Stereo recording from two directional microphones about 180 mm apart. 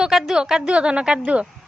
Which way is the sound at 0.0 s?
Centre (ahead or behind).